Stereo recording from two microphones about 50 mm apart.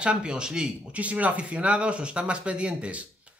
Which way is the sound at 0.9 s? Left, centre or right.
Right.